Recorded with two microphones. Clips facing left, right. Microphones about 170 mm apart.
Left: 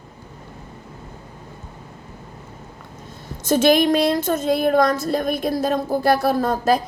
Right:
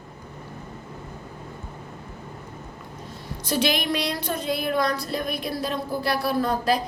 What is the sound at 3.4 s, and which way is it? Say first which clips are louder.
Speech: left 9 dB; 45° left (ahead or behind).